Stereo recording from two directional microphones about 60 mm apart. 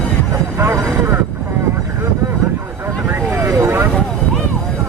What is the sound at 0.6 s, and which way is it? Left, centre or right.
Vehicle, right.